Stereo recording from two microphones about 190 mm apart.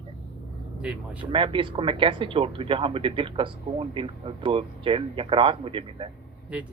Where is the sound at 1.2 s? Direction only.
25° right (ahead or behind).